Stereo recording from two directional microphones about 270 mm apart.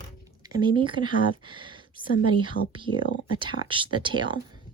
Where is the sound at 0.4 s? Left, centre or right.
Centre.